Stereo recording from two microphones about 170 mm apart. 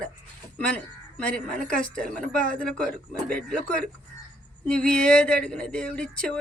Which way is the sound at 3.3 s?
5° left (ahead or behind).